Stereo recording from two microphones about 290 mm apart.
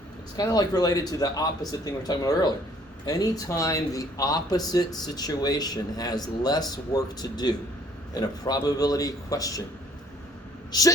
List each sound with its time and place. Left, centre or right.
0.3 s speech: centre
10.7 s speech: centre